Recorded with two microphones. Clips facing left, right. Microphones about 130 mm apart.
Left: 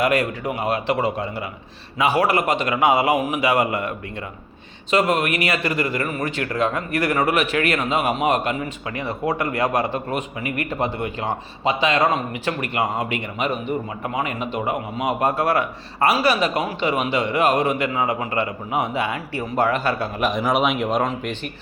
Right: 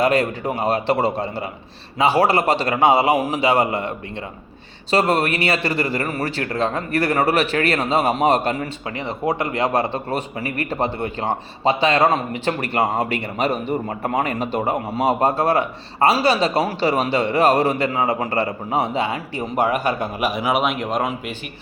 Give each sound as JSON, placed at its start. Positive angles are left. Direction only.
{"t": 0.0, "sound": "a man's voice", "side_deg": -30}
{"t": 9.0, "sound": "a man's voice", "side_deg": -20}